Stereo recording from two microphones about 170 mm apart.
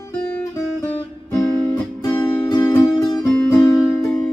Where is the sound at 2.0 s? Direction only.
20° left (ahead or behind).